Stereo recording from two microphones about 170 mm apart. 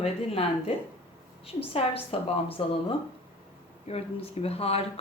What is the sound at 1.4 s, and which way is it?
Speech, 35° left (ahead or behind).